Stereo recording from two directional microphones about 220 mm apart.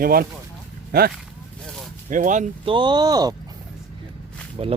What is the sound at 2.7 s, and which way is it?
Speech, 20° right (ahead or behind).